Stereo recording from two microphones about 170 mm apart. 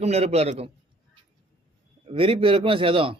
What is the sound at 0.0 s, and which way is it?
Speech, 40° right (ahead or behind).